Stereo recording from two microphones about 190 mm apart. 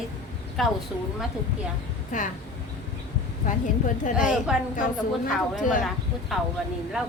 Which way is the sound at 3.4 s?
40° left (ahead or behind).